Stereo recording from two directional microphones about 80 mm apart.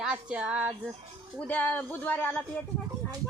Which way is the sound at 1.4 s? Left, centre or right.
Left.